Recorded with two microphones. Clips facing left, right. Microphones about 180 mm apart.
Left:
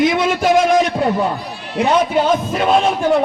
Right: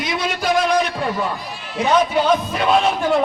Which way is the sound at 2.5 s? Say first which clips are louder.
Left 2 dB; 45° left (ahead or behind).